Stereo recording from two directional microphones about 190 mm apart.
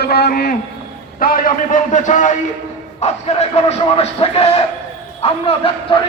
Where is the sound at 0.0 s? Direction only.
55° left (ahead or behind).